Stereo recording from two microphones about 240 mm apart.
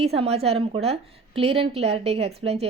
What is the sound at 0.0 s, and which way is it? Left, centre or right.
A woman's voice, right.